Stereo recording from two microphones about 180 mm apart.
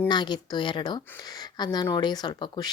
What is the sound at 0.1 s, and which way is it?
Speech, 25° left (ahead or behind).